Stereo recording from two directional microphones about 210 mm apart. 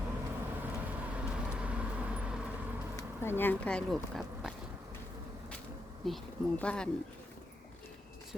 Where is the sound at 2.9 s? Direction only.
10° left (ahead or behind).